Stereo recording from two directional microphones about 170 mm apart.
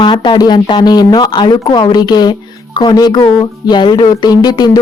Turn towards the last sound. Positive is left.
turn(degrees=25)  # may be behind; listen again after turning